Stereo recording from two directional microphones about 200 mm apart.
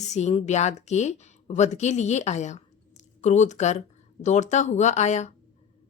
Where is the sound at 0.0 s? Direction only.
35° left (ahead or behind).